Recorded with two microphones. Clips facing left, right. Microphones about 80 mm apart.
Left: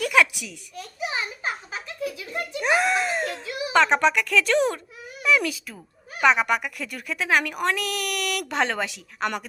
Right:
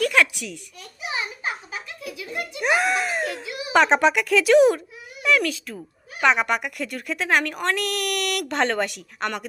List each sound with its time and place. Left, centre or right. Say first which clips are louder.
0.0 s a woman's voice: even; centre
1.7 s a child's voice: left 3 dB; left
2.6 s a woman's voice: even; centre
5.4 s a woman's voice: right 3 dB; centre